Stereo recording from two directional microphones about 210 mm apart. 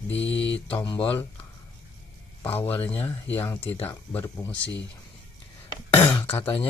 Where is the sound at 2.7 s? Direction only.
10° left (ahead or behind).